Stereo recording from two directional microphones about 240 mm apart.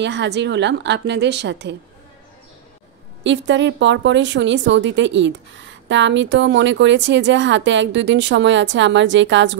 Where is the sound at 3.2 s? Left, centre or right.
Right.